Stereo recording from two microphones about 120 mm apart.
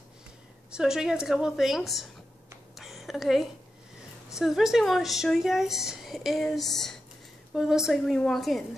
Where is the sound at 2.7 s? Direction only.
Centre (ahead or behind).